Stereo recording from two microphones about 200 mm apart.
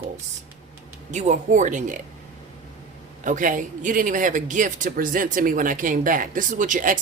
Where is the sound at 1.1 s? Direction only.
35° right (ahead or behind).